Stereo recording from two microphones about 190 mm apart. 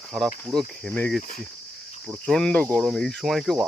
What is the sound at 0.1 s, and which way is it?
Speech, centre (ahead or behind).